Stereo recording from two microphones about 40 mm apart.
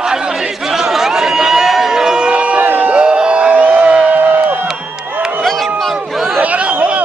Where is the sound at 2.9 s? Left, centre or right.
Right.